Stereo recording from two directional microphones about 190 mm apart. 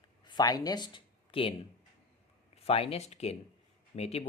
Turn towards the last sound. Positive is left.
turn(degrees=35)  # may be behind; listen again after turning